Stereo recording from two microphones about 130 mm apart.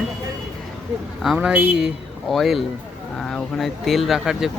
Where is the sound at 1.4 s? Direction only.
10° right (ahead or behind).